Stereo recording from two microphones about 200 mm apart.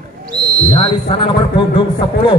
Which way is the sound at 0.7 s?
30° left (ahead or behind).